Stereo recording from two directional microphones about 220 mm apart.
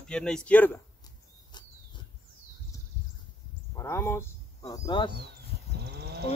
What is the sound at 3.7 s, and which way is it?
Speech, 10° left (ahead or behind).